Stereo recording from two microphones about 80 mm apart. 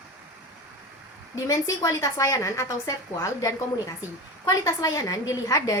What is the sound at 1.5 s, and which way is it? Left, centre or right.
A woman's voice, left.